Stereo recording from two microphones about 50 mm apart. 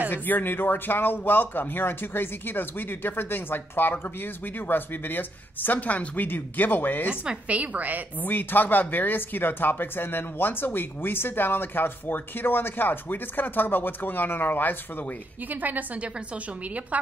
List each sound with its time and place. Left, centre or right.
0.1 s speech: left
7.1 s a woman's voice: right
8.2 s speech: left
15.5 s a woman's voice: right